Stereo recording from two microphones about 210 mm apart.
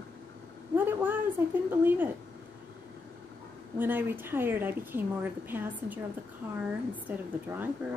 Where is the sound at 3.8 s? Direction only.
10° right (ahead or behind).